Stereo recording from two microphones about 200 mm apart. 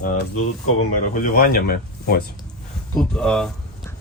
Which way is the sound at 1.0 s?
45° left (ahead or behind).